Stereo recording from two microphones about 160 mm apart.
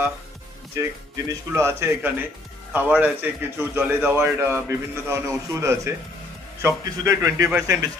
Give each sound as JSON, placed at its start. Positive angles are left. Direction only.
{"t": 0.7, "sound": "a man's voice", "side_deg": -15}